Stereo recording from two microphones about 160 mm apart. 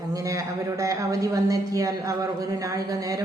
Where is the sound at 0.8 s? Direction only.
20° right (ahead or behind).